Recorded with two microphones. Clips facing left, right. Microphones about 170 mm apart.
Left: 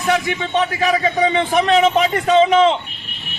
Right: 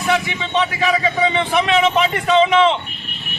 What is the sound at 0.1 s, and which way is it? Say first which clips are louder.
A man's voice: left 2 dB; 45° left (ahead or behind).